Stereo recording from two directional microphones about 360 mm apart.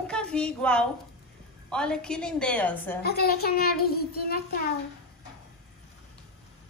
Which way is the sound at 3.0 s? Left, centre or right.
Left.